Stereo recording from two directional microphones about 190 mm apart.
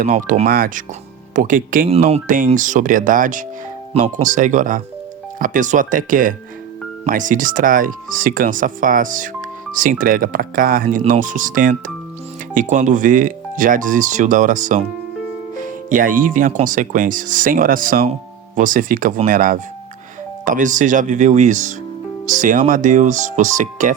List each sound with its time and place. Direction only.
0.0 s speech: 45° right (ahead or behind)
1.9 s speech: 35° right (ahead or behind)